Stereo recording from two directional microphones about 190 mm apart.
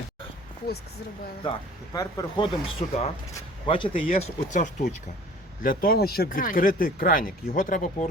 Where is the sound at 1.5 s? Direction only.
20° left (ahead or behind); by 4.9 s 40° left (ahead or behind).